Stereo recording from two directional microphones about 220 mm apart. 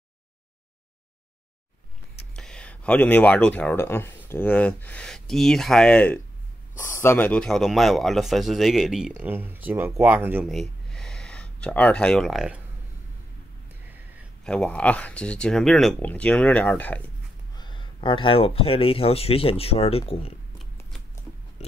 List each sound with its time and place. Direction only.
2.3 s speech: 5° left (ahead or behind)
14.4 s speech: 5° left (ahead or behind)
17.6 s speech: 20° left (ahead or behind)
21.6 s a sound: 30° left (ahead or behind)